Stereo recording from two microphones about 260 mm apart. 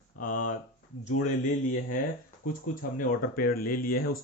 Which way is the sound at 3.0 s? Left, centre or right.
Left.